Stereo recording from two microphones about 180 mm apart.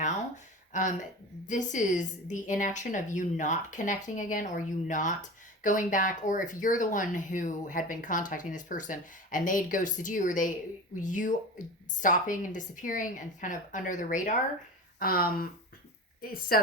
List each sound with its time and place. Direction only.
0.7 s a woman's voice: 45° left (ahead or behind)